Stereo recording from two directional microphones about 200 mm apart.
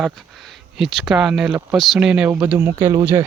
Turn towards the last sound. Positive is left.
turn(degrees=-15)  # may be behind; listen again after turning